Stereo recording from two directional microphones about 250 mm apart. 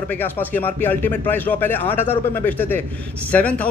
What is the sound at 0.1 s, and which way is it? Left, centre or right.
A man's voice, centre.